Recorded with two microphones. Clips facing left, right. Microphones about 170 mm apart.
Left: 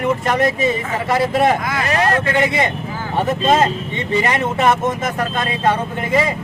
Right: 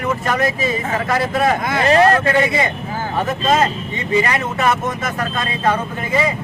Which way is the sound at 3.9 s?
25° left (ahead or behind).